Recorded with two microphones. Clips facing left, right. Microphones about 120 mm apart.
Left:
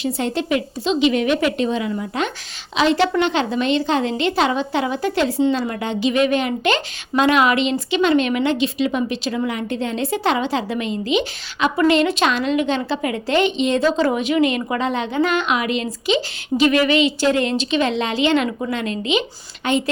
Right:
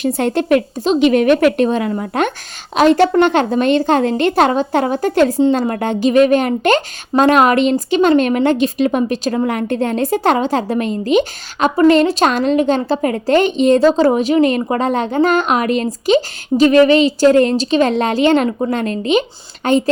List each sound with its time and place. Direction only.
0.0 s speech: 55° right (ahead or behind)